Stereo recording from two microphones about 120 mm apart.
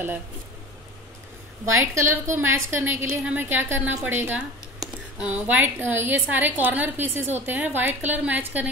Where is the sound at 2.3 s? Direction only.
20° right (ahead or behind).